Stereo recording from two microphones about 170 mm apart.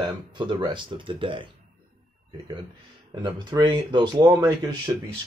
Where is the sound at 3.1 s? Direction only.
25° right (ahead or behind).